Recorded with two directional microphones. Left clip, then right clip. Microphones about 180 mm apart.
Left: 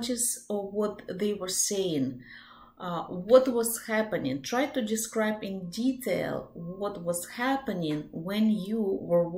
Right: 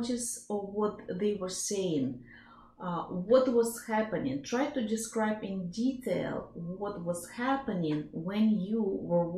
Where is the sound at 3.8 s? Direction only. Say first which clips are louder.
Left 3 dB; 15° left (ahead or behind).